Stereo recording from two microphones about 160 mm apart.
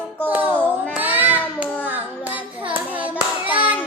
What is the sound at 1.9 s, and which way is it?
Hands, 10° right (ahead or behind).